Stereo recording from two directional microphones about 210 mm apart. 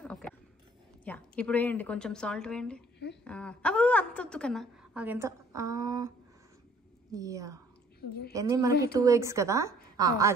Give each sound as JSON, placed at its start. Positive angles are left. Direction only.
{"t": 0.0, "sound": "a sound", "side_deg": 5}
{"t": 1.0, "sound": "a woman's voice", "side_deg": 5}
{"t": 5.0, "sound": "a woman's voice", "side_deg": -10}